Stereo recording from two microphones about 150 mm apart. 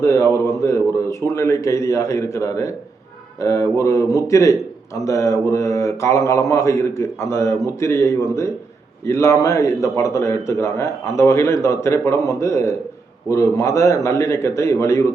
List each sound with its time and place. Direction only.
0.0 s a man's voice: 20° left (ahead or behind)